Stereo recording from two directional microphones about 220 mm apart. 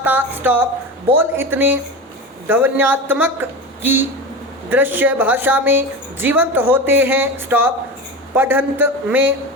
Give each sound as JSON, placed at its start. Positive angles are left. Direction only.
{"t": 0.0, "sound": "a woman's voice", "side_deg": -10}
{"t": 4.7, "sound": "a woman's voice", "side_deg": -10}